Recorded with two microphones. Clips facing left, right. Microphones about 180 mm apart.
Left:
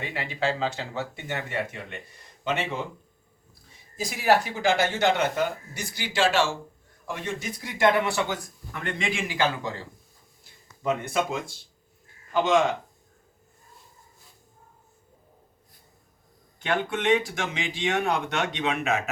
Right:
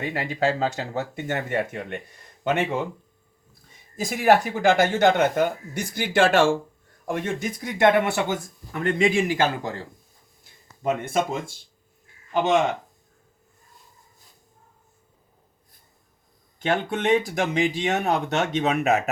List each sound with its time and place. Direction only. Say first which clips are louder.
0.0 s speech: right 4 dB; 45° right (ahead or behind)
3.9 s speech: right 4 dB; 50° right (ahead or behind)
11.1 s speech: right 2 dB; 50° right (ahead or behind)
16.6 s speech: right 2 dB; 40° right (ahead or behind)